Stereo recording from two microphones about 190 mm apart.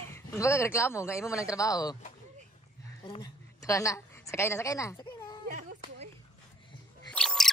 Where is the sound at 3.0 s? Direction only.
20° left (ahead or behind).